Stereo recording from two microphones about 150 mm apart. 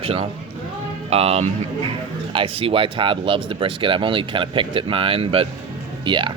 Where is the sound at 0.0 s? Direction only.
40° right (ahead or behind).